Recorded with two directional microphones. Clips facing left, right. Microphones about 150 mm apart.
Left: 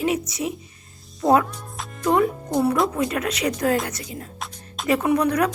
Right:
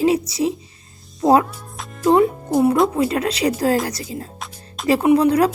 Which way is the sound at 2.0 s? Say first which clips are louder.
Right 5 dB; 30° right (ahead or behind).